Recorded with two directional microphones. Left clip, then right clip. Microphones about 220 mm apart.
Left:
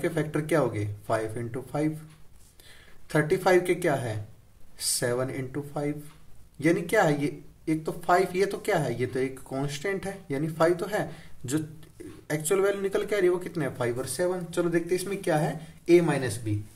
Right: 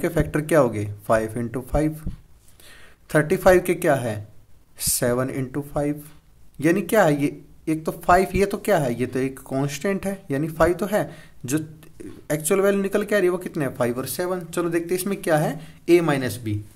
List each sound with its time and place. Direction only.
0.0 s speech: 35° right (ahead or behind)